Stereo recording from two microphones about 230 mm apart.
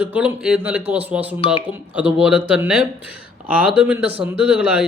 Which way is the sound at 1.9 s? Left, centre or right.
Centre.